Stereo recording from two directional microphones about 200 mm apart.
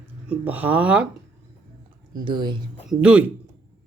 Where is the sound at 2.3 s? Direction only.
20° right (ahead or behind).